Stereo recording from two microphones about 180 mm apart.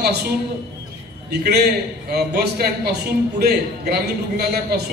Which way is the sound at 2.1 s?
60° right (ahead or behind).